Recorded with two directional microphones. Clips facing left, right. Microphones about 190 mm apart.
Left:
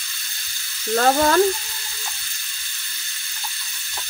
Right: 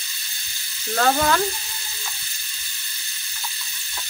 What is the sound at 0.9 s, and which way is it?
Frying, 35° left (ahead or behind).